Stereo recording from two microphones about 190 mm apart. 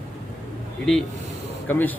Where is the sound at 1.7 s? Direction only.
10° left (ahead or behind).